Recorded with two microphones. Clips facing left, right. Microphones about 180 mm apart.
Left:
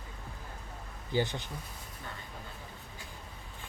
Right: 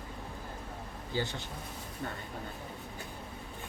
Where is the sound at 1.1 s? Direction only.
15° left (ahead or behind).